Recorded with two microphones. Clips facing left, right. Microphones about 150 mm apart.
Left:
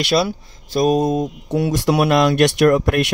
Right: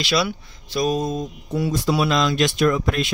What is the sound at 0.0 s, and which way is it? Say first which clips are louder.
Speech: left 4 dB; 50° left (ahead or behind).